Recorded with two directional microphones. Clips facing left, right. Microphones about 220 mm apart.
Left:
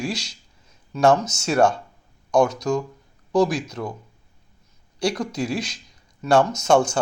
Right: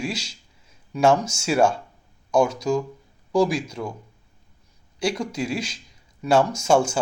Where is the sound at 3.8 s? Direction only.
10° right (ahead or behind).